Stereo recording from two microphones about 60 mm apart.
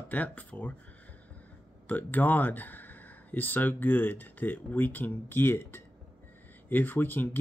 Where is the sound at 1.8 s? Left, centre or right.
Left.